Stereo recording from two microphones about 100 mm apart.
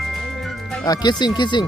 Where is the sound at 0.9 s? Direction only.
45° left (ahead or behind).